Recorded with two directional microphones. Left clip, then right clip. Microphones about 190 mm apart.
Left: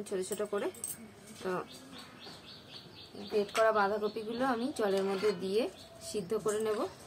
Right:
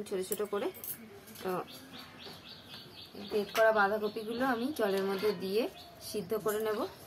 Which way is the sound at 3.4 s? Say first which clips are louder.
Right 1 dB; 15° left (ahead or behind).